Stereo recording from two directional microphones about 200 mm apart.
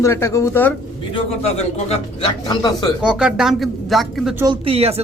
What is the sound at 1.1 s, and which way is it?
A man's voice, 30° left (ahead or behind).